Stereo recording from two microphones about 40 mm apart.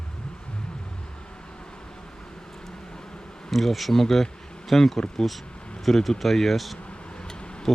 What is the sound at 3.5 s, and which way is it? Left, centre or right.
Speech, centre.